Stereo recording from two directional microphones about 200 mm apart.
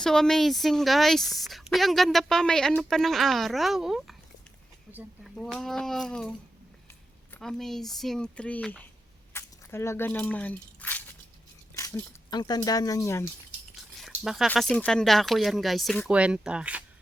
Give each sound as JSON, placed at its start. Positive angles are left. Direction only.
{"t": 0.0, "sound": "speech", "side_deg": 5}
{"t": 7.3, "sound": "speech", "side_deg": 0}
{"t": 9.3, "sound": "squish", "side_deg": 15}
{"t": 11.7, "sound": "speech", "side_deg": 15}
{"t": 13.7, "sound": "speech", "side_deg": 0}